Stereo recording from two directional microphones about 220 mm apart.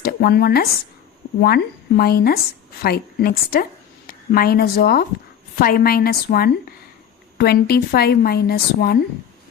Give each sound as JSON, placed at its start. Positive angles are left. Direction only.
{"t": 0.0, "sound": "a woman's voice", "side_deg": 45}